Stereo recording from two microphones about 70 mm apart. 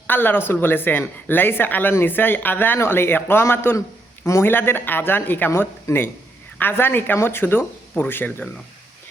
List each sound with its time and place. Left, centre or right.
0.1 s speech: left